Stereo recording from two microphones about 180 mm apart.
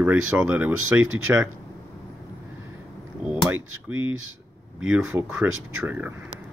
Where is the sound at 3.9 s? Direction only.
90° right.